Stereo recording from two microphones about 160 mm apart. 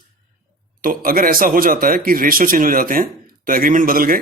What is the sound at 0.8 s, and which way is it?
A man's voice, 65° right (ahead or behind).